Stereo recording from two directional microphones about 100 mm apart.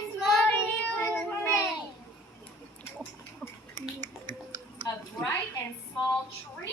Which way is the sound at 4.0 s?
45° right (ahead or behind).